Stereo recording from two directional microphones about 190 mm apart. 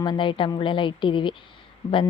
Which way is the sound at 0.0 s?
25° left (ahead or behind).